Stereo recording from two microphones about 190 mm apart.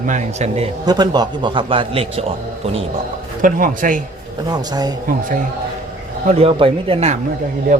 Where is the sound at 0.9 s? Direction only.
20° right (ahead or behind).